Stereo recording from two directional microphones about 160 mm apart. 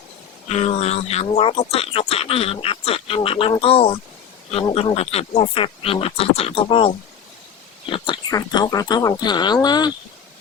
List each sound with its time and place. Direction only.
0.4 s speech: 40° left (ahead or behind)